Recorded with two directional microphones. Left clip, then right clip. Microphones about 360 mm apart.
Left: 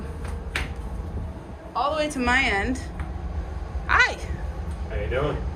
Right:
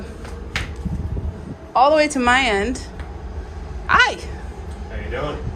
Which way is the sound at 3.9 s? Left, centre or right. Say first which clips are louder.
Right 5 dB; centre.